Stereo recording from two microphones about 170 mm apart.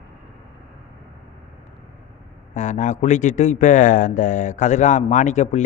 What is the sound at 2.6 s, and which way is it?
Speech, 45° left (ahead or behind).